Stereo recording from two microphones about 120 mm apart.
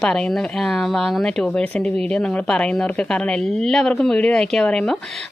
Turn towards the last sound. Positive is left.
turn(degrees=5)  # may be behind; listen again after turning